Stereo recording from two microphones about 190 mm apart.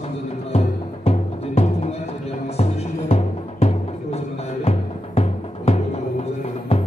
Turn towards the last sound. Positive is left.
turn(degrees=30)  # may be behind; listen again after turning